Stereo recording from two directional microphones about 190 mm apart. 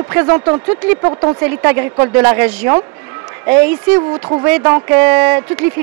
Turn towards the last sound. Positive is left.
turn(degrees=-10)  # may be behind; listen again after turning